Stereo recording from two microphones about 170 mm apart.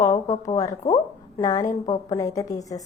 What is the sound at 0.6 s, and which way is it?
A woman's voice, 20° left (ahead or behind).